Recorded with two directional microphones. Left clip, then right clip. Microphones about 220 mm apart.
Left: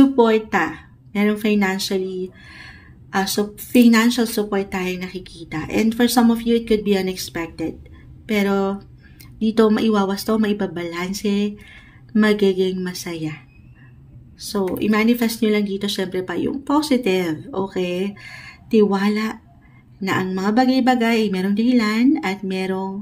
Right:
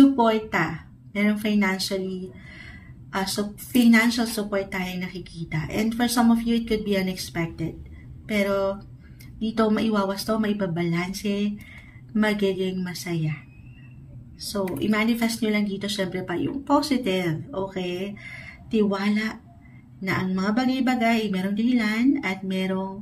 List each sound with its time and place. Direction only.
0.1 s a woman's voice: 45° left (ahead or behind)
14.5 s a woman's voice: 45° left (ahead or behind)